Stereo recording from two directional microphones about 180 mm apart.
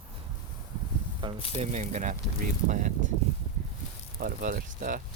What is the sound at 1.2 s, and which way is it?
Speech, 25° right (ahead or behind).